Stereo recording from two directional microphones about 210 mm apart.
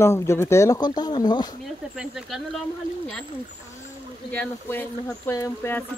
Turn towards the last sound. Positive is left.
turn(degrees=15)  # may be behind; listen again after turning